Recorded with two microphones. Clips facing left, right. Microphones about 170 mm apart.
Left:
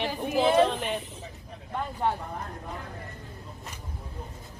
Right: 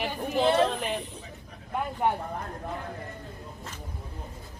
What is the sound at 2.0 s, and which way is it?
Speech, 10° right (ahead or behind).